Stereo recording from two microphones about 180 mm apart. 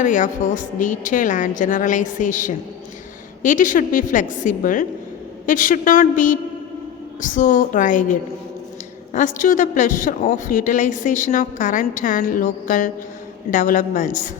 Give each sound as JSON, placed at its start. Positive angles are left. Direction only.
{"t": 0.0, "sound": "a woman's voice", "side_deg": 45}